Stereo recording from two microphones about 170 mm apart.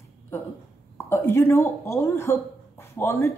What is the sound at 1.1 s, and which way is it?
Speech, 15° left (ahead or behind).